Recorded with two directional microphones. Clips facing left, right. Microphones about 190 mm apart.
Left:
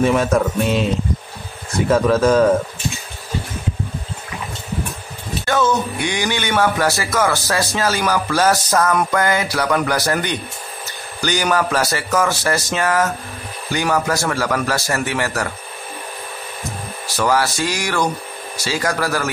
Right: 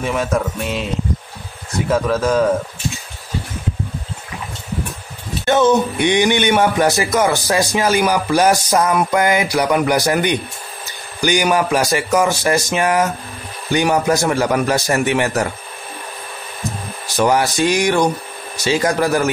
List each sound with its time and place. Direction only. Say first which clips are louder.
0.0 s speech: left 4 dB; 5° right (ahead or behind)
1.9 s speech: left 3 dB; 5° right (ahead or behind)
5.4 s a man's voice: right 5 dB; 20° right (ahead or behind)
17.2 s a man's voice: right 3 dB; 20° right (ahead or behind)